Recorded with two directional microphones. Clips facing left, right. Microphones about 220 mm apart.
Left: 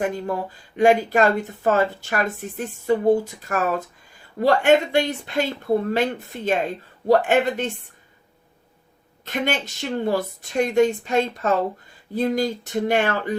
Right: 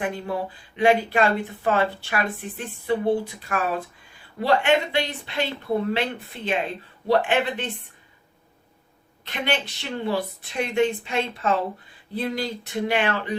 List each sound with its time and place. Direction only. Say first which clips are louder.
0.0 s speech: left 3 dB; 45° left (ahead or behind)
9.2 s speech: left 2 dB; 45° left (ahead or behind)